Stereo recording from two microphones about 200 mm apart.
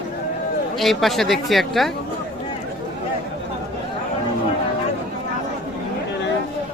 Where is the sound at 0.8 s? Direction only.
Centre (ahead or behind).